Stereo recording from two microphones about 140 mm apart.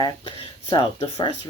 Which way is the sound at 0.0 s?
35° left (ahead or behind).